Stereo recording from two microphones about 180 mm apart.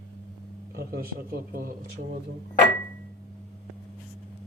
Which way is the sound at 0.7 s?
55° right (ahead or behind).